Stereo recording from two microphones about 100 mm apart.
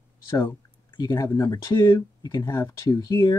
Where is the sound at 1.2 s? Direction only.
30° left (ahead or behind).